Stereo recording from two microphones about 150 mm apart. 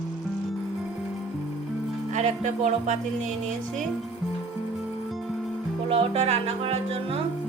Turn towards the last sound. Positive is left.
turn(degrees=-45)  # may be behind; listen again after turning